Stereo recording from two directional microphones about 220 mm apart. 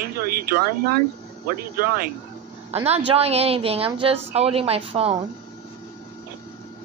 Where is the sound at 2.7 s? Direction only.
25° right (ahead or behind).